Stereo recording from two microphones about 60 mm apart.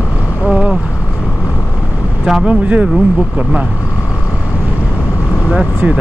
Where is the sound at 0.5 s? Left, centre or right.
Centre.